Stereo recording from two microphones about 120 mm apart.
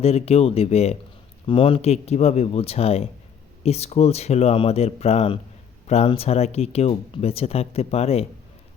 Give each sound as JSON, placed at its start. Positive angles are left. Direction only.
{"t": 0.0, "sound": "speech", "side_deg": 60}
{"t": 1.5, "sound": "speech", "side_deg": 45}